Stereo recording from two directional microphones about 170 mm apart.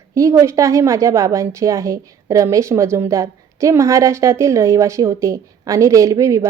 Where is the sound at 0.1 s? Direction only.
20° right (ahead or behind).